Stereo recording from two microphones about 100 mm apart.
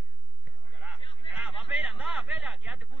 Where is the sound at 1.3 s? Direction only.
15° right (ahead or behind).